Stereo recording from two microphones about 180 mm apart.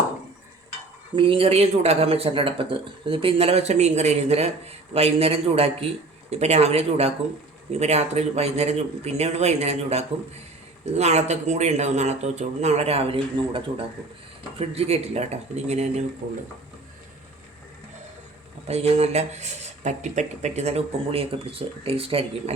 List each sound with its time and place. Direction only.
1.1 s speech: 30° right (ahead or behind)
14.6 s speech: 35° right (ahead or behind)
18.7 s speech: 35° right (ahead or behind)